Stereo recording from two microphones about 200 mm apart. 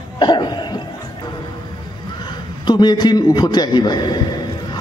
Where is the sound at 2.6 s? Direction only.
20° left (ahead or behind).